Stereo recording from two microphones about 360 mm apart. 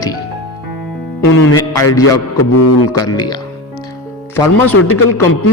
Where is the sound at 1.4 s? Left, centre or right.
Left.